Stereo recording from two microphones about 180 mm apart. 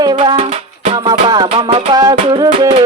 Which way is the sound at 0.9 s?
20° right (ahead or behind).